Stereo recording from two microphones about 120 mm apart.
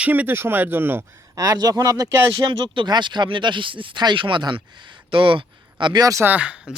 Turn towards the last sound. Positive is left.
turn(degrees=-10)  # may be behind; listen again after turning